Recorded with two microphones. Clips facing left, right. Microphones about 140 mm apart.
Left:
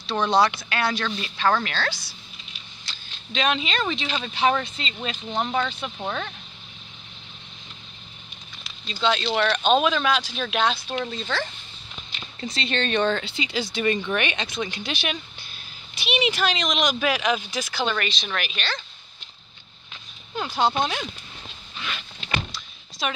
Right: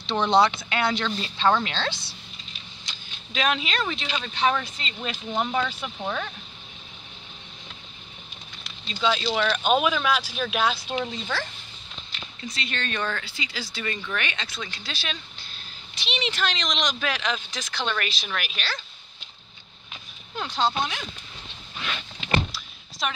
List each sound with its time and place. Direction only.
0.2 s speech: 25° right (ahead or behind)
3.3 s speech: centre (ahead or behind)
8.6 s speech: centre (ahead or behind)
12.4 s speech: 30° left (ahead or behind); by 18.8 s centre (ahead or behind)
20.3 s speech: 10° left (ahead or behind)
22.5 s thunk: centre (ahead or behind)